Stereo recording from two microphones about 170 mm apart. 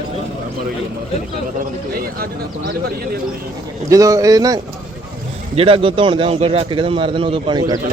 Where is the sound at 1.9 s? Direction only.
60° right (ahead or behind).